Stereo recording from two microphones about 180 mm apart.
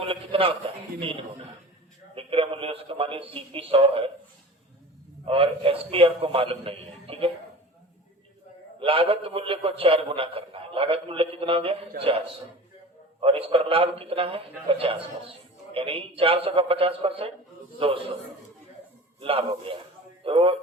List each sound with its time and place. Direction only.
0.0 s a sound: 30° right (ahead or behind)
0.9 s a man's voice: 30° right (ahead or behind)
5.2 s a man's voice: 30° right (ahead or behind)
8.8 s a man's voice: 30° right (ahead or behind)
13.1 s a man's voice: 30° right (ahead or behind)
19.2 s a man's voice: 30° right (ahead or behind)